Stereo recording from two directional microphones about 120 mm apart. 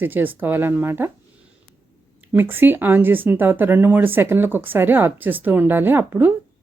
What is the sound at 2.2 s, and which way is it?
Speech, 15° right (ahead or behind).